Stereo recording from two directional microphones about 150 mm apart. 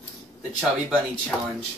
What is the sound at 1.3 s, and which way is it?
Speech, 5° left (ahead or behind).